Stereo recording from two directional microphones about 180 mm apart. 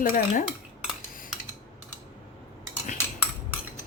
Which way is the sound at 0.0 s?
45° left (ahead or behind).